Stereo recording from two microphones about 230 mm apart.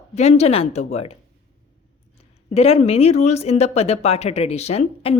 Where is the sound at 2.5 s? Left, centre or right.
Left.